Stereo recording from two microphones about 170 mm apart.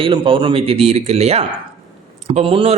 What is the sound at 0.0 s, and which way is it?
Speech, 30° right (ahead or behind).